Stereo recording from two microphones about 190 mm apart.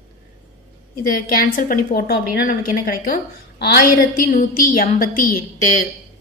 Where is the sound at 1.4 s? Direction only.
50° left (ahead or behind).